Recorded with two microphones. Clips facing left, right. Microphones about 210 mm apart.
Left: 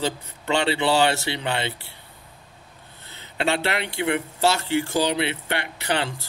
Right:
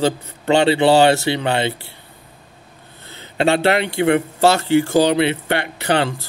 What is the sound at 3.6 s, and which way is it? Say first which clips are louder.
A man's voice: right 9 dB; 40° right (ahead or behind).